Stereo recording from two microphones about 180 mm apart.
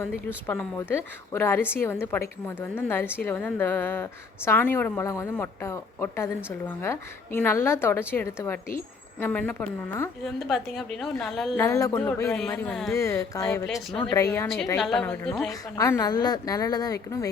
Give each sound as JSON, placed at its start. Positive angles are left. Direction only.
{"t": 0.4, "sound": "a woman's voice", "side_deg": 10}
{"t": 11.5, "sound": "a woman's voice", "side_deg": 15}
{"t": 12.9, "sound": "a woman's voice", "side_deg": 15}
{"t": 13.7, "sound": "a woman's voice", "side_deg": 0}
{"t": 14.1, "sound": "a woman's voice", "side_deg": 15}
{"t": 14.4, "sound": "a woman's voice", "side_deg": 0}